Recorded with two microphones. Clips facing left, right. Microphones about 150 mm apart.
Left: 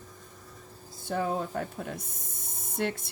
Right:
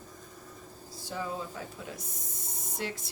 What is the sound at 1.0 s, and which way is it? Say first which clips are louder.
Speech: left 6 dB; 55° left (ahead or behind).